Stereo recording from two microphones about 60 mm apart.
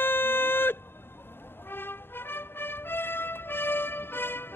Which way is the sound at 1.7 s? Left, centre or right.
Left.